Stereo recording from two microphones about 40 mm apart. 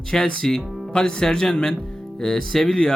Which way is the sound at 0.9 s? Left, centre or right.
Left.